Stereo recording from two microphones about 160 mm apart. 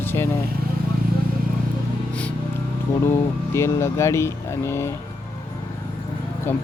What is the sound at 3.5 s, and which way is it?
Speech, 15° left (ahead or behind).